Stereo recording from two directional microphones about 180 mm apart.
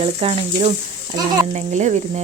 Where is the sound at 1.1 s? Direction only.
20° right (ahead or behind).